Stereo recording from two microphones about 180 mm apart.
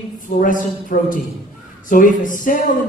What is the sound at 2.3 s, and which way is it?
Speech, 50° left (ahead or behind).